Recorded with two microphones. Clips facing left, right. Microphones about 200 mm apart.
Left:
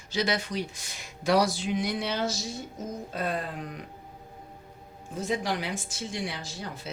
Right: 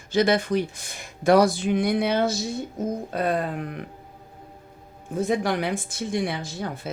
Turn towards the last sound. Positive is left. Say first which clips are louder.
# right 7 dB
turn(degrees=-55)  # may be behind; listen again after turning